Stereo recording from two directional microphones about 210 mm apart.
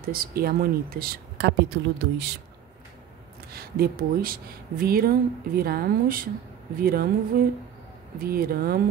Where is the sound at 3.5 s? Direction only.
45° right (ahead or behind).